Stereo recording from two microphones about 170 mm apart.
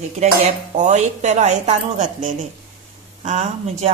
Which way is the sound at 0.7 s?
45° right (ahead or behind).